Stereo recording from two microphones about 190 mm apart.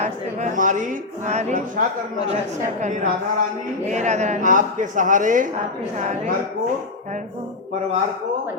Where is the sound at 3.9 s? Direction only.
35° right (ahead or behind).